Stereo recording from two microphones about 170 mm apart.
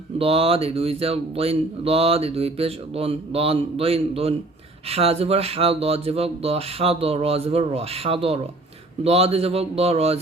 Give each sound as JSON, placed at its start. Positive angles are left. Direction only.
{"t": 0.2, "sound": "speech", "side_deg": -35}